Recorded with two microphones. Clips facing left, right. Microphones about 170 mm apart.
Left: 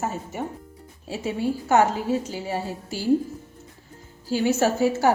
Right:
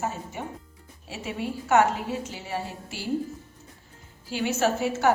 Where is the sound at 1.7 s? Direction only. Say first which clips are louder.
Left 1 dB; 35° left (ahead or behind).